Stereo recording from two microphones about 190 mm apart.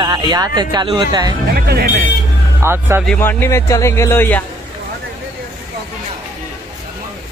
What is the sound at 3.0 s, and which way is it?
Speech, 10° left (ahead or behind).